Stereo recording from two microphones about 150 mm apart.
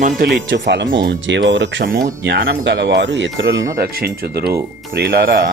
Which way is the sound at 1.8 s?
80° right.